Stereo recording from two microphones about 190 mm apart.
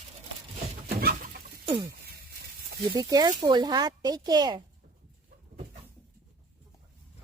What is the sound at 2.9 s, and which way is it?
Speech, 20° right (ahead or behind).